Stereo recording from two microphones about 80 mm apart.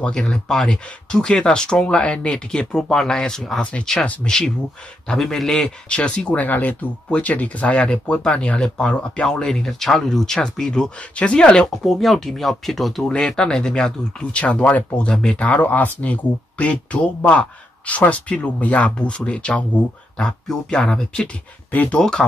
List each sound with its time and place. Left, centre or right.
0.0 s speech: centre
3.6 s speech: centre
21.7 s speech: centre